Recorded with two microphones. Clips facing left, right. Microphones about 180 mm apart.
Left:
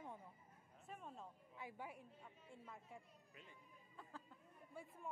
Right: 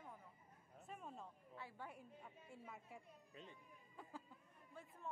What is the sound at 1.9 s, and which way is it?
A woman's voice, 5° right (ahead or behind).